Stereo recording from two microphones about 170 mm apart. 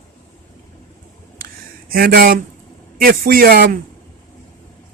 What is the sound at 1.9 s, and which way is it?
Speech, 60° right (ahead or behind).